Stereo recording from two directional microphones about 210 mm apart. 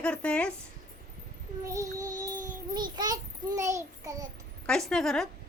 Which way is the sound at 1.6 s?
15° right (ahead or behind).